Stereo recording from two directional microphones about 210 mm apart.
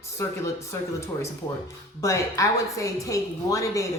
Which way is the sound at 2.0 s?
15° left (ahead or behind).